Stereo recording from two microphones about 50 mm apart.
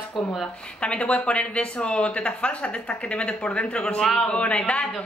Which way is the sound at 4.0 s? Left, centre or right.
Centre.